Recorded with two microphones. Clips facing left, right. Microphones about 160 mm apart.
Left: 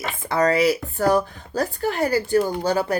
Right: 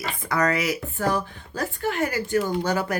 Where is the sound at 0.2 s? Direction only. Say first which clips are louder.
Left 5 dB; 30° left (ahead or behind).